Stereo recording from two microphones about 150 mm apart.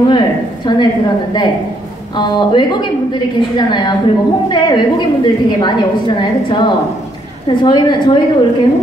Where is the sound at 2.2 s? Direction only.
30° left (ahead or behind).